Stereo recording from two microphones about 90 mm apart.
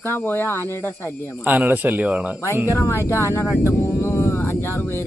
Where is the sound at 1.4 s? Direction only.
20° right (ahead or behind).